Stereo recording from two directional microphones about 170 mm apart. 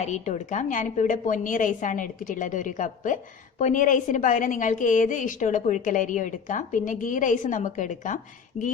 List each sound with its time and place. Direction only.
0.0 s a woman's voice: 45° left (ahead or behind)
8.5 s speech: 40° left (ahead or behind)